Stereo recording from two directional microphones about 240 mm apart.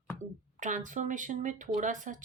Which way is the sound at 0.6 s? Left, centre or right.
Right.